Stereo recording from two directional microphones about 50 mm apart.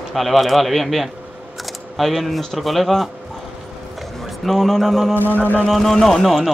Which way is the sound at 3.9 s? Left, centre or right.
Centre.